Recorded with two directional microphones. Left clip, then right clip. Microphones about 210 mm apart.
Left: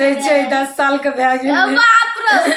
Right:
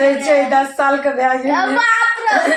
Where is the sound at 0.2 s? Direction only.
15° left (ahead or behind).